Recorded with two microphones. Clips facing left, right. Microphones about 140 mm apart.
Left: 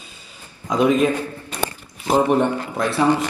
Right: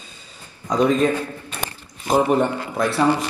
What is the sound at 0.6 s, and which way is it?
Speech, 10° left (ahead or behind).